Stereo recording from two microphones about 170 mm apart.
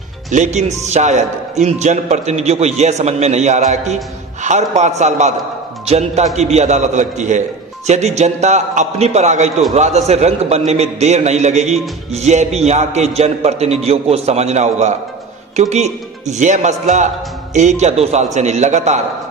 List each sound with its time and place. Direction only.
0.3 s music: 45° right (ahead or behind)
15.7 s speech: 40° right (ahead or behind)
17.5 s music: 45° right (ahead or behind)